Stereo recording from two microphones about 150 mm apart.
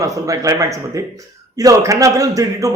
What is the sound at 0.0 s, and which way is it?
Speech, 20° right (ahead or behind).